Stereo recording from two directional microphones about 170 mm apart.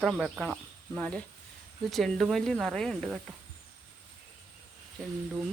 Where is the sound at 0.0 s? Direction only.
5° right (ahead or behind).